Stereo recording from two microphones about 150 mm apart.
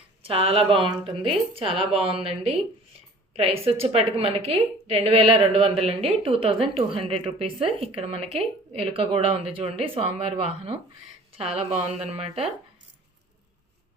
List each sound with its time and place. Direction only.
0.2 s a woman's voice: 40° right (ahead or behind)